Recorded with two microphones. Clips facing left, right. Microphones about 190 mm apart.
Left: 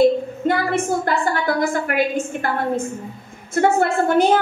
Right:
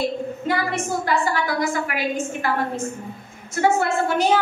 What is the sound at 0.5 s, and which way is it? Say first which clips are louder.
A woman's voice: left 5 dB; 55° left (ahead or behind).